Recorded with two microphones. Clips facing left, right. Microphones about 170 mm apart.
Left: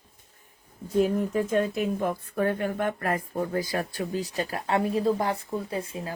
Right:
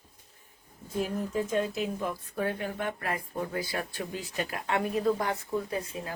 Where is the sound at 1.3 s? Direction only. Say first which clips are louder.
Left 4 dB; 55° left (ahead or behind).